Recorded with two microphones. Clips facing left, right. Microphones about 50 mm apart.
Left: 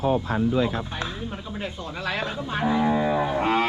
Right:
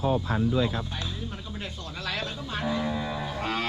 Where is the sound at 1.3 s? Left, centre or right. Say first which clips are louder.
Left 5 dB; left.